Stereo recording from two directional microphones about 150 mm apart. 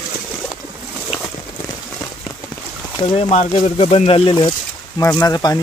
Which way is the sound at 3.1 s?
45° left (ahead or behind).